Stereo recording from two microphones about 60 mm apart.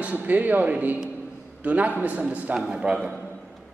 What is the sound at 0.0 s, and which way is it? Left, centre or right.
A man's voice, right.